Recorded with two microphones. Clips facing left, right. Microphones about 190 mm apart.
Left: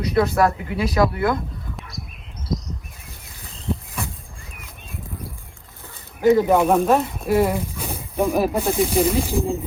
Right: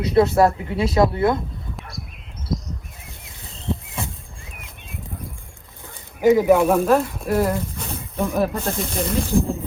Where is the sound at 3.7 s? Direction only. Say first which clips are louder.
Even; 25° right (ahead or behind).